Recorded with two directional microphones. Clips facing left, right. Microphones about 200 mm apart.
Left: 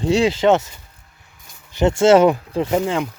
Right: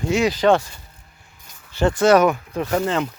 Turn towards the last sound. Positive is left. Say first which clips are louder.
# left 1 dB
turn(degrees=10)  # may be behind; listen again after turning